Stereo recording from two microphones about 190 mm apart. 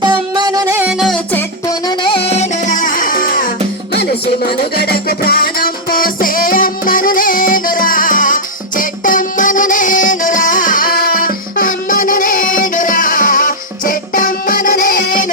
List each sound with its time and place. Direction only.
0.0 s music: 25° right (ahead or behind); by 1.7 s 10° left (ahead or behind)
1.9 s music: 30° left (ahead or behind); by 3.5 s 45° left (ahead or behind)
4.8 s music: 55° left (ahead or behind)